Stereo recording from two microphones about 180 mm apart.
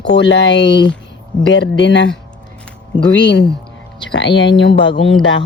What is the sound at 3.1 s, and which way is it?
A man's voice, 75° left (ahead or behind).